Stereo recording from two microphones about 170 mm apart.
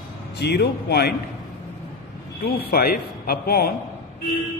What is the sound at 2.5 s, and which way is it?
Speech, 65° left (ahead or behind).